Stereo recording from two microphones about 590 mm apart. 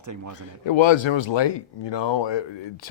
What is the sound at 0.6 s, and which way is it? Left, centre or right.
Speech, left.